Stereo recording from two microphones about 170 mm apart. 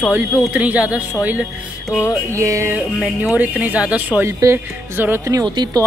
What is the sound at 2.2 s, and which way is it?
Speech, 20° right (ahead or behind).